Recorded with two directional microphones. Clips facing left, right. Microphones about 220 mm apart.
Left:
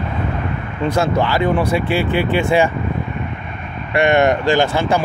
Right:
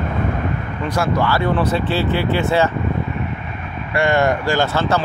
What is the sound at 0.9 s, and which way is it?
Speech, 20° left (ahead or behind).